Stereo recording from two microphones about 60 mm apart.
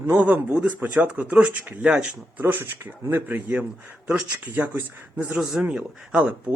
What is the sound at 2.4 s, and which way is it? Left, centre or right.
Speech, right.